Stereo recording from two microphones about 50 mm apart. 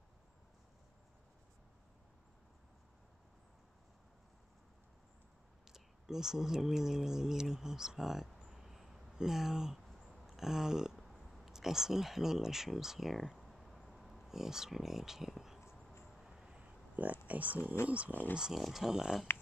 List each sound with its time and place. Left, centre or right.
5.7 s speech: centre
8.5 s a sound: centre
11.0 s speech: centre
16.0 s vehicle: centre
16.4 s a sound: right
16.9 s speech: right
18.4 s speech: centre